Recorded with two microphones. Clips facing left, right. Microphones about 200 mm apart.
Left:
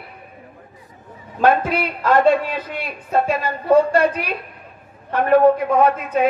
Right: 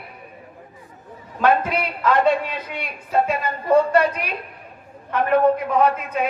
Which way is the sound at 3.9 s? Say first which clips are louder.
Left 1 dB; 30° left (ahead or behind).